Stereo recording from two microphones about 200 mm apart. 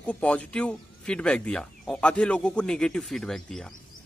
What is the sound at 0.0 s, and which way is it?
Speech, 5° left (ahead or behind).